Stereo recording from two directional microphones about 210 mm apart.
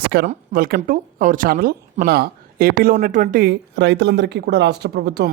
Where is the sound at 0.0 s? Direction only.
50° right (ahead or behind).